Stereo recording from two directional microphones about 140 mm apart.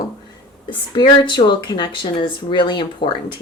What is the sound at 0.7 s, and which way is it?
Speech, 35° left (ahead or behind).